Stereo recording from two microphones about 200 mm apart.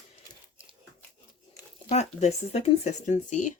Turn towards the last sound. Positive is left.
turn(degrees=40)  # may be behind; listen again after turning